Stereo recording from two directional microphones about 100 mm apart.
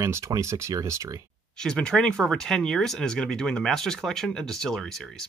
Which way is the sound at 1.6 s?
10° left (ahead or behind).